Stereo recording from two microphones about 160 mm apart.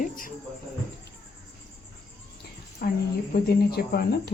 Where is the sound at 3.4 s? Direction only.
80° left.